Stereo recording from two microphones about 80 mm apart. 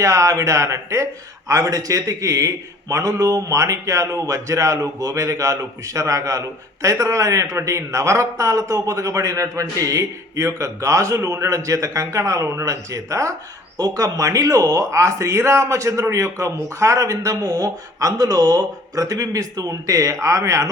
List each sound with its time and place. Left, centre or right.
0.0 s a man's voice: right